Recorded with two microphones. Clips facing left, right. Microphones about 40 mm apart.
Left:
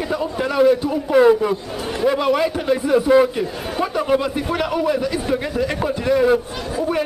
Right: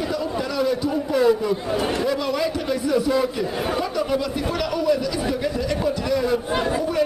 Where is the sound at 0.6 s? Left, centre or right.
Left.